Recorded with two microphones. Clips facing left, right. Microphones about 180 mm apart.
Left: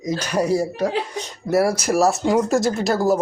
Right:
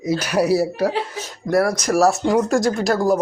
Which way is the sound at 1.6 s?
30° left (ahead or behind).